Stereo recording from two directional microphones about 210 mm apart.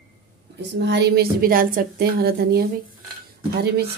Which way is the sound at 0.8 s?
55° right (ahead or behind).